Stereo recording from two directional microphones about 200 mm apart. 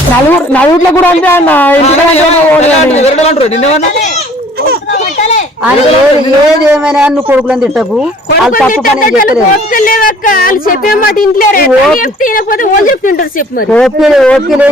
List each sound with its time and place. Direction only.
0.5 s a man's voice: 10° left (ahead or behind)
1.8 s a man's voice: 35° left (ahead or behind)
6.7 s speech: 5° right (ahead or behind)
9.0 s a woman's voice: 45° left (ahead or behind)
13.7 s speech: 5° left (ahead or behind)